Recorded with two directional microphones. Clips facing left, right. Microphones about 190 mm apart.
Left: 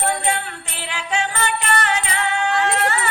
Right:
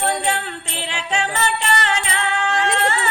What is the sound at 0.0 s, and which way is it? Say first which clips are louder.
Jingle bell: right 1 dB; 25° right (ahead or behind).